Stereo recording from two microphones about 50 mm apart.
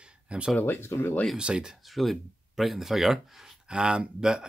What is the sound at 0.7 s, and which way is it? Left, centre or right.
Speech, left.